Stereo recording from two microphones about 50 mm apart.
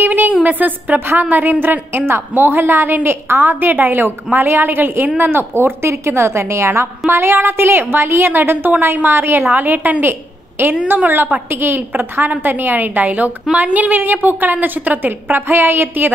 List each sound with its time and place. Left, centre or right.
0.0 s a sound: right
0.3 s a woman's voice: right
2.0 s a woman's voice: right
5.3 s a woman's voice: right
7.1 s a woman's voice: right
9.5 s a woman's voice: right
11.5 s a woman's voice: right